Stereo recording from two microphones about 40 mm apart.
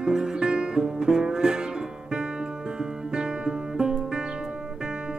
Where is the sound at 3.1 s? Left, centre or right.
Right.